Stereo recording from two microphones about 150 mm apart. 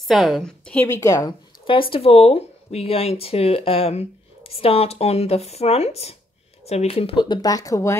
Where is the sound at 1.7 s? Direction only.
35° left (ahead or behind).